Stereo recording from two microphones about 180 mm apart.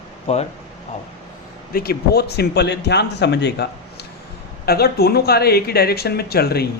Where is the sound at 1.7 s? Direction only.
60° left (ahead or behind).